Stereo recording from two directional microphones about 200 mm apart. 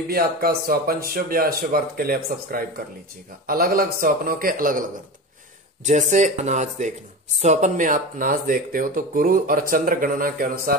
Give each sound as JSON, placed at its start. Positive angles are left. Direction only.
{"t": 0.1, "sound": "speech", "side_deg": -50}
{"t": 5.9, "sound": "speech", "side_deg": -35}